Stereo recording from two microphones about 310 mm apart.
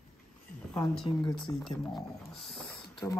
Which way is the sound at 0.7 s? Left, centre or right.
Centre.